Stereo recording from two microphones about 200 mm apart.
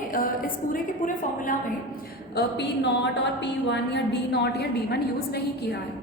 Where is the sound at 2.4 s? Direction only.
60° left (ahead or behind).